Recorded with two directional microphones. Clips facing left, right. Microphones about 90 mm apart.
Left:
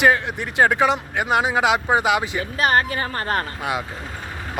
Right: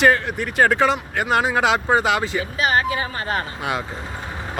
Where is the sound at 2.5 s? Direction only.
50° left (ahead or behind).